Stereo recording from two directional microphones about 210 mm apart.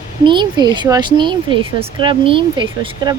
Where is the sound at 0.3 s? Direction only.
20° right (ahead or behind).